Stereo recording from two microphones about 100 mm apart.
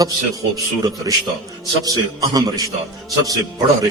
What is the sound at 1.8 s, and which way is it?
A man's voice, 35° right (ahead or behind).